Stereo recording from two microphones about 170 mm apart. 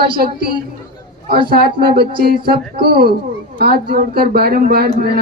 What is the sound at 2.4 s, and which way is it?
A woman's voice, 65° right (ahead or behind).